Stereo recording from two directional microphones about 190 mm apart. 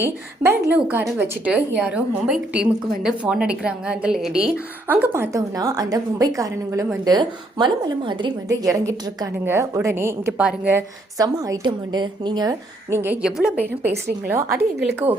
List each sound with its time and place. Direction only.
0.0 s a woman's voice: 10° right (ahead or behind)